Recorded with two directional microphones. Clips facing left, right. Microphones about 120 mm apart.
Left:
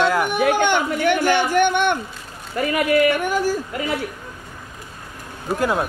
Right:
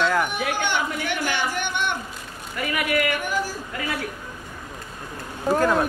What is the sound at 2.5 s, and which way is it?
Speech, 35° left (ahead or behind).